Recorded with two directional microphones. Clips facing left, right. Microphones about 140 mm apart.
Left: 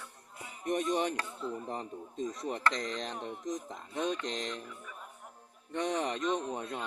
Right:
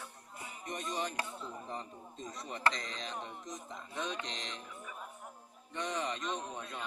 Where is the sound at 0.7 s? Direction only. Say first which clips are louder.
Left 8 dB; 60° left (ahead or behind).